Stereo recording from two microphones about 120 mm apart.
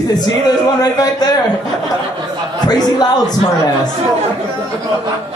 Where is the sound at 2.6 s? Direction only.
35° left (ahead or behind).